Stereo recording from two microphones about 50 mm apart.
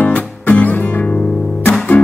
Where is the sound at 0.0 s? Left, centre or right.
Left.